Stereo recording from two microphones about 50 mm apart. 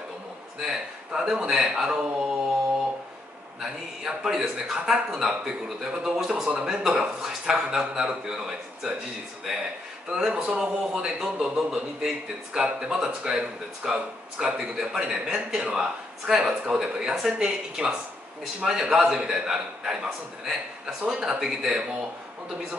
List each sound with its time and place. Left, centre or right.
0.6 s a man's voice: centre
4.0 s a man's voice: centre
10.0 s a man's voice: centre